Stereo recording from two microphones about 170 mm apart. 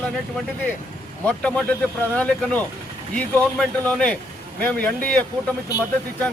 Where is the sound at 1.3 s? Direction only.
5° left (ahead or behind).